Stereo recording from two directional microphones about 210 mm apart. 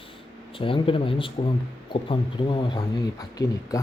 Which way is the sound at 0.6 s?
25° left (ahead or behind).